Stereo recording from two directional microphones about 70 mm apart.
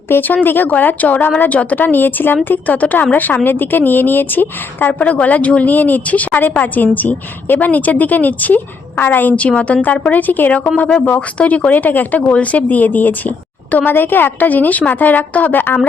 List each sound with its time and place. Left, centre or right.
0.1 s a woman's voice: left